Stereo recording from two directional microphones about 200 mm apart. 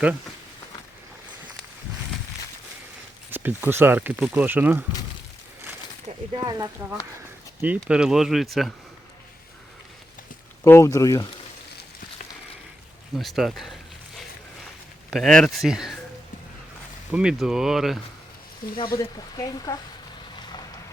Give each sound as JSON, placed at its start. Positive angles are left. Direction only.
{"t": 3.2, "sound": "speech", "side_deg": -10}
{"t": 6.3, "sound": "speech", "side_deg": -20}
{"t": 7.6, "sound": "speech", "side_deg": -10}
{"t": 10.6, "sound": "speech", "side_deg": 15}
{"t": 13.1, "sound": "speech", "side_deg": 0}
{"t": 15.1, "sound": "speech", "side_deg": 0}
{"t": 17.1, "sound": "speech", "side_deg": -5}
{"t": 18.8, "sound": "speech", "side_deg": 20}